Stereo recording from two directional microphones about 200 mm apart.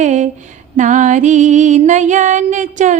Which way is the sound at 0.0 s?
35° right (ahead or behind).